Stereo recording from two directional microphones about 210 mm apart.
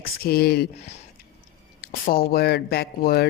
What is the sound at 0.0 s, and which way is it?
Speech, 45° left (ahead or behind).